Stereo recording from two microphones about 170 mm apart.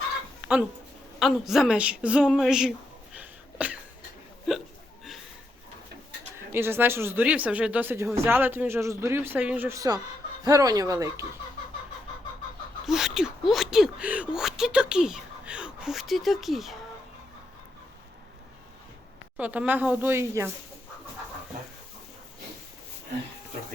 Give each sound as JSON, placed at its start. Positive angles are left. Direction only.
{"t": 1.2, "sound": "speech", "side_deg": 0}
{"t": 3.2, "sound": "sneeze", "side_deg": -10}
{"t": 6.3, "sound": "speech", "side_deg": -15}
{"t": 12.8, "sound": "speech", "side_deg": 0}
{"t": 19.4, "sound": "speech", "side_deg": -10}